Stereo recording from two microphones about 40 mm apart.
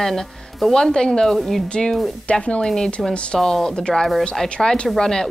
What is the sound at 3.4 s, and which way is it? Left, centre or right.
Speech, centre.